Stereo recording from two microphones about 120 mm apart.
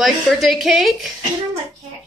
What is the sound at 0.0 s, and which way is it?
Speech, centre (ahead or behind).